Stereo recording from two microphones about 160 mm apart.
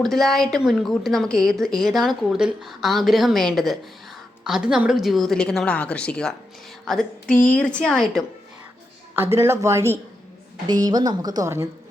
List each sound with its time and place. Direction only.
0.0 s a woman's voice: centre (ahead or behind)
9.1 s a woman's voice: 15° right (ahead or behind)